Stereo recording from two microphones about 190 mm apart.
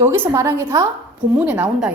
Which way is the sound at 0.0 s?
10° right (ahead or behind).